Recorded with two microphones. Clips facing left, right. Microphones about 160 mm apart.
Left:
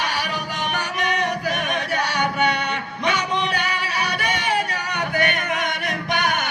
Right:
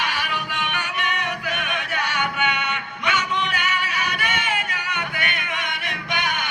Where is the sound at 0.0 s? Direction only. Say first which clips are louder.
Left 2 dB; 40° left (ahead or behind).